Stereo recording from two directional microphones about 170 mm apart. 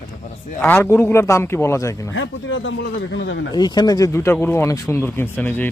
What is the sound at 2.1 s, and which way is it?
Speech, 90° left.